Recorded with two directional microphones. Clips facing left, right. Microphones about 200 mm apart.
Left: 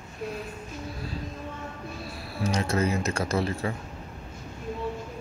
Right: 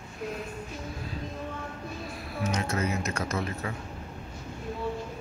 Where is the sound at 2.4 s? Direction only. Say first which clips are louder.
Left 4 dB; 30° left (ahead or behind).